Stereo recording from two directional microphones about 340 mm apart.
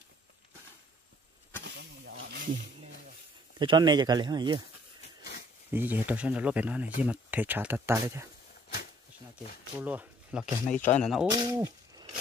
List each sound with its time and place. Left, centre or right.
1.6 s snake: right
3.5 s speech: centre
5.7 s speech: centre
9.8 s speech: centre
11.3 s a sound: centre